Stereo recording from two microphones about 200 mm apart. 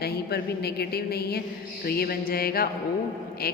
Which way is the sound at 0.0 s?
50° left (ahead or behind).